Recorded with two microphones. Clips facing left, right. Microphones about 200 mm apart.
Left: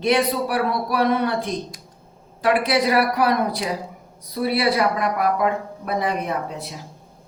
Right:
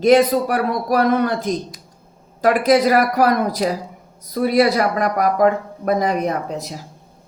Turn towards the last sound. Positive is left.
turn(degrees=-40)  # may be behind; listen again after turning